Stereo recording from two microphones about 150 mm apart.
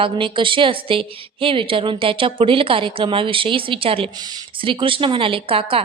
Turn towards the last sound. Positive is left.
turn(degrees=-40)  # may be behind; listen again after turning